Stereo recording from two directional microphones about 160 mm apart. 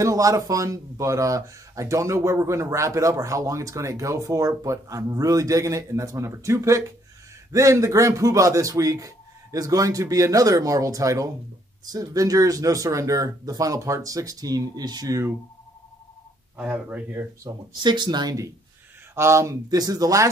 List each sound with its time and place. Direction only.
0.0 s speech: 20° right (ahead or behind)
16.5 s speech: 10° right (ahead or behind)